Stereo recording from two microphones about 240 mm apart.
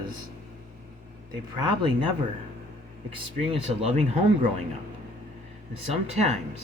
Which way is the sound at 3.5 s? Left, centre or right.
Right.